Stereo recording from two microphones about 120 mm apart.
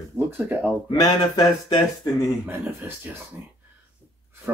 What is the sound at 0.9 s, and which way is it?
Speech, 35° left (ahead or behind).